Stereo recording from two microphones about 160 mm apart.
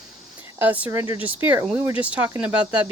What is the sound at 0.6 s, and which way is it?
Speech, 10° right (ahead or behind).